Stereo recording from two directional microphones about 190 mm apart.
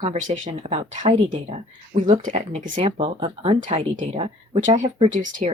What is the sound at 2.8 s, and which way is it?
Speech, 25° right (ahead or behind).